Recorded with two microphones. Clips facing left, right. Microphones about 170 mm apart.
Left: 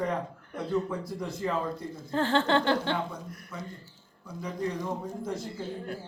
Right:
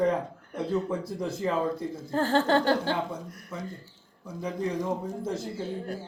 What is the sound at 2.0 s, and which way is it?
Speech, 40° right (ahead or behind).